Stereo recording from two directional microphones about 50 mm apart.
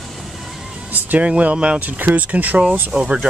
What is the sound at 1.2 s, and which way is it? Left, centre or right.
Speech, right.